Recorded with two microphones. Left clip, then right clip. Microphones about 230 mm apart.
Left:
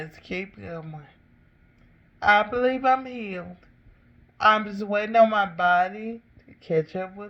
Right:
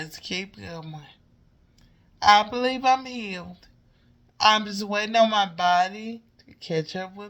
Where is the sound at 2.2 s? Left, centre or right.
Centre.